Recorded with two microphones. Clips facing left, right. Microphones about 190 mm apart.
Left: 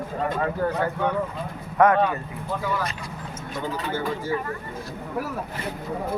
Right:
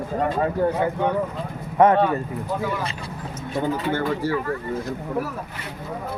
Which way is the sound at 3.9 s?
65° right (ahead or behind).